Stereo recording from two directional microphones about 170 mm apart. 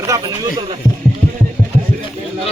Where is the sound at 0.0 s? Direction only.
20° right (ahead or behind).